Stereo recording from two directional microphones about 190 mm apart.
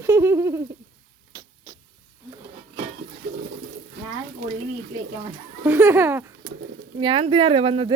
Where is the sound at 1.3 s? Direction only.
20° right (ahead or behind).